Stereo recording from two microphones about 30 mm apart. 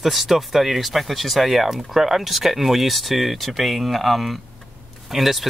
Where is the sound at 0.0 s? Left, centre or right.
Centre.